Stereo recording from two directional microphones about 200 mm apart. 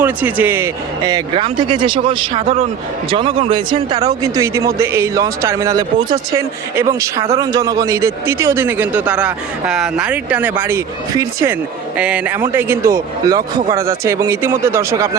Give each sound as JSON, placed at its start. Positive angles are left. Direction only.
{"t": 0.0, "sound": "a man's voice", "side_deg": -10}